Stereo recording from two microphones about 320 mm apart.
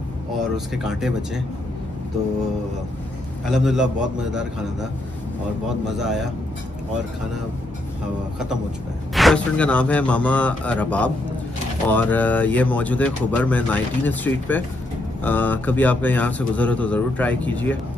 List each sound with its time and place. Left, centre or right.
0.8 s speech: centre
3.4 s speech: centre
5.9 s speech: centre
9.1 s speech: centre